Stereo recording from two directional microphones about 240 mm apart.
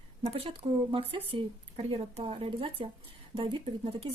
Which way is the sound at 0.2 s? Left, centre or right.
Right.